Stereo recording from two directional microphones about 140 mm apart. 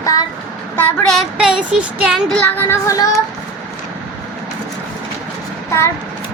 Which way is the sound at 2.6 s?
20° left (ahead or behind).